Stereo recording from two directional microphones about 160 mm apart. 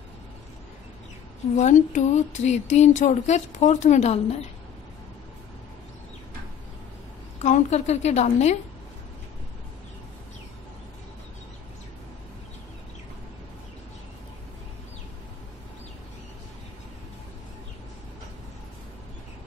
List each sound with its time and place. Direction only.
1.6 s speech: 50° left (ahead or behind)
7.4 s speech: 45° left (ahead or behind)